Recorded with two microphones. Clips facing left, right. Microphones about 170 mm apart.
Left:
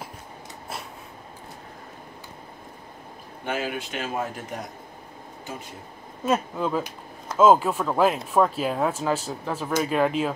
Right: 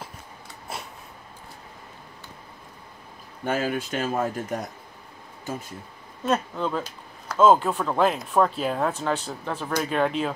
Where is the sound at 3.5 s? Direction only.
40° right (ahead or behind).